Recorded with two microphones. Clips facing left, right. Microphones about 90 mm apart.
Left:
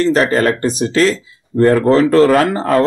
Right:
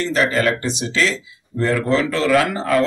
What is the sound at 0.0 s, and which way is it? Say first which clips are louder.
Speech: left 5 dB; 45° left (ahead or behind).